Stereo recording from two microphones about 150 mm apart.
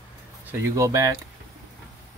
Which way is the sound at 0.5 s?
20° right (ahead or behind).